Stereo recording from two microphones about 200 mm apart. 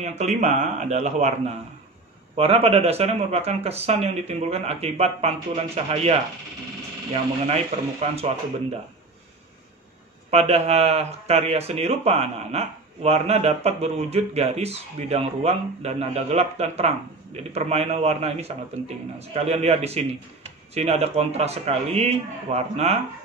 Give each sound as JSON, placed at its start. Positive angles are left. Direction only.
{"t": 0.0, "sound": "speech", "side_deg": -35}
{"t": 2.3, "sound": "speech", "side_deg": -30}
{"t": 7.1, "sound": "speech", "side_deg": -30}
{"t": 10.3, "sound": "speech", "side_deg": -30}